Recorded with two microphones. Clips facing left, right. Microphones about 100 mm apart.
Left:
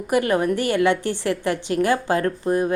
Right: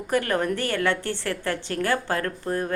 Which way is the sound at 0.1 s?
15° left (ahead or behind).